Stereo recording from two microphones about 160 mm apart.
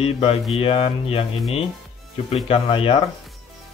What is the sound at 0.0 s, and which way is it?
Speech, 35° left (ahead or behind).